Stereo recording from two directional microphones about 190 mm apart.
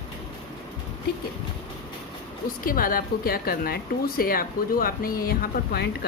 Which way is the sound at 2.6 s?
50° left (ahead or behind).